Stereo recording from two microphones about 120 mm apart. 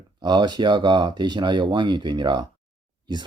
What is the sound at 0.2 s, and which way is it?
Speech, 35° right (ahead or behind).